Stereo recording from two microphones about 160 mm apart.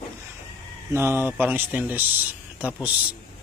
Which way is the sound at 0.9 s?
15° right (ahead or behind).